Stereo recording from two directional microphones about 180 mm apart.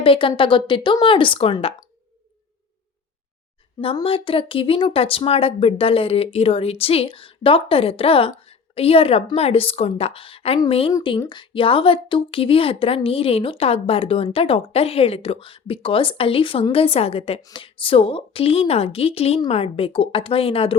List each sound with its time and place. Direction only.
0.0 s speech: 30° left (ahead or behind)
3.8 s speech: 30° left (ahead or behind)